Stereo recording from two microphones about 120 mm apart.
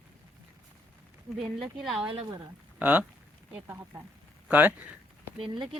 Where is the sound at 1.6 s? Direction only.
Centre (ahead or behind).